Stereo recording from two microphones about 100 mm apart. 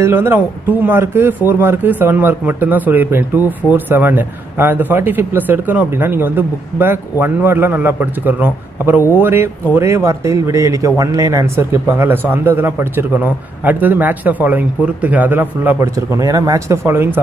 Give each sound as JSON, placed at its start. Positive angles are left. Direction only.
{"t": 0.0, "sound": "speech", "side_deg": -20}
{"t": 16.2, "sound": "speech", "side_deg": -35}